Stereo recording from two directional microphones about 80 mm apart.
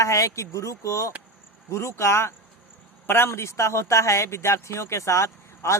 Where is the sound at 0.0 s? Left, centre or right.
Left.